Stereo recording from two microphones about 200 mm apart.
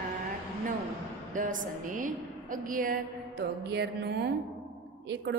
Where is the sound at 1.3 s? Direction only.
40° right (ahead or behind).